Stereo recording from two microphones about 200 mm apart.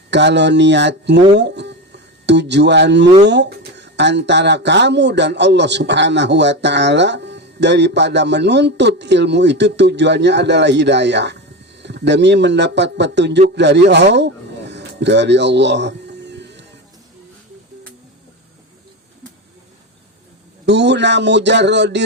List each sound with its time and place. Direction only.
0.1 s speech: 60° right (ahead or behind)
20.7 s speech: 60° right (ahead or behind)